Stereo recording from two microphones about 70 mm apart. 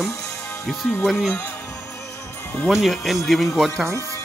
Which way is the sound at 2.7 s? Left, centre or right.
Centre.